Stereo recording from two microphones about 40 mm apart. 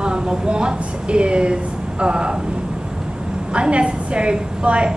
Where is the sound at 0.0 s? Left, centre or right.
Right.